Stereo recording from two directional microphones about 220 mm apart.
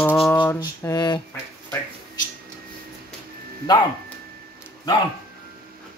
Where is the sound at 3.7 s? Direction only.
20° left (ahead or behind).